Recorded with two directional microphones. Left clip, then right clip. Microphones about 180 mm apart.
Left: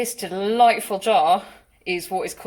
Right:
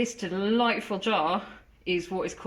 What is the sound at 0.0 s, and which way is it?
A woman's voice, 50° left (ahead or behind).